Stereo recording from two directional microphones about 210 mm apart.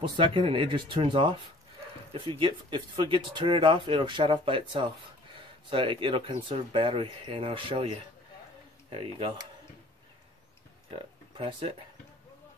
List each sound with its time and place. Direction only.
0.2 s speech: 25° right (ahead or behind)
10.9 s speech: 25° right (ahead or behind)